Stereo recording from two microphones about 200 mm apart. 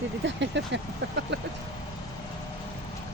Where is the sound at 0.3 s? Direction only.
65° right (ahead or behind).